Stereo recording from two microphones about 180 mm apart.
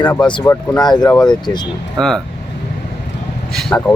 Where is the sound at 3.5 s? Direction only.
5° left (ahead or behind).